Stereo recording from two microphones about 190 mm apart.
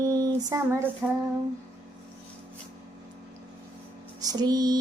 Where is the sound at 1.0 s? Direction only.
10° right (ahead or behind).